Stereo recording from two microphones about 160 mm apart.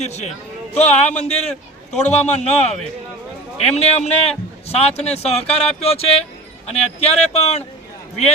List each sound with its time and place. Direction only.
0.0 s a man's voice: 45° left (ahead or behind)